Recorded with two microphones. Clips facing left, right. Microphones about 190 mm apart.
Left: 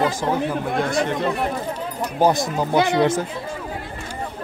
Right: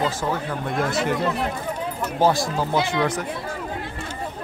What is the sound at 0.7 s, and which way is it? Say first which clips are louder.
Speech: right 2 dB; centre (ahead or behind).